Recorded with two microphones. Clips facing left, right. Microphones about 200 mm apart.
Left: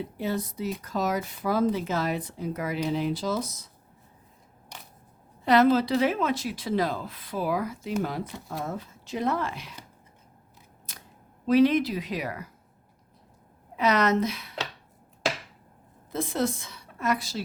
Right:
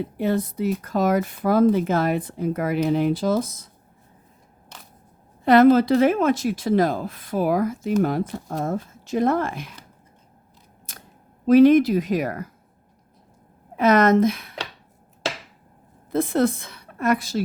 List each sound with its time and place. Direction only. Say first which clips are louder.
0.2 s speech: right 7 dB; 55° right (ahead or behind)
4.7 s single-lens reflex camera: even; 15° left (ahead or behind)
5.5 s a woman's voice: right 6 dB; 50° right (ahead or behind)
11.4 s a woman's voice: right 7 dB; 50° right (ahead or behind)
13.7 s a woman's voice: right 7 dB; 50° right (ahead or behind)
16.1 s a woman's voice: right 7 dB; 60° right (ahead or behind)